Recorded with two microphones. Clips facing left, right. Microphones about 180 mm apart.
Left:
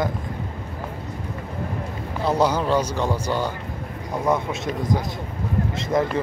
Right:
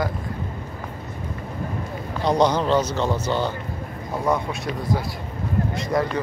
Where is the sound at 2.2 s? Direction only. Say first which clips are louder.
Right 1 dB; 5° left (ahead or behind).